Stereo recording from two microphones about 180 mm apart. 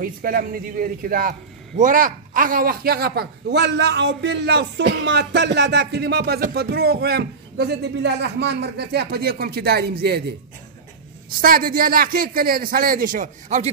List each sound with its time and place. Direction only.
0.0 s a man's voice: 50° right (ahead or behind)
11.4 s a man's voice: 55° right (ahead or behind)